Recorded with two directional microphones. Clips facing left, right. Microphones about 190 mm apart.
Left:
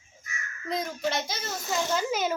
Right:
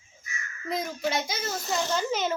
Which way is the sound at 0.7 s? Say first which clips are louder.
Even; centre (ahead or behind).